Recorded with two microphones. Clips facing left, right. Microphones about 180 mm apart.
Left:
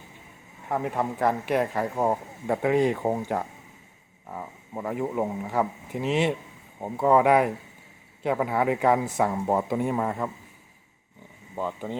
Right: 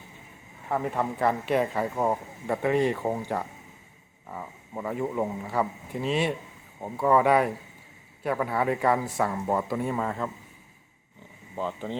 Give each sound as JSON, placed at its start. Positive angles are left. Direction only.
{"t": 0.7, "sound": "speech", "side_deg": 10}
{"t": 11.5, "sound": "speech", "side_deg": 10}